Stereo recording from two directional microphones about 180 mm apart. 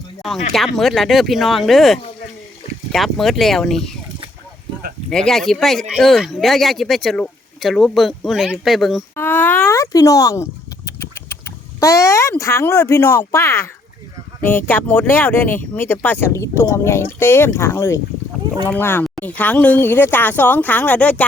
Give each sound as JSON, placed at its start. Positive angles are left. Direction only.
{"t": 0.2, "sound": "speech", "side_deg": 0}
{"t": 5.1, "sound": "speech", "side_deg": 5}
{"t": 9.1, "sound": "speech", "side_deg": 10}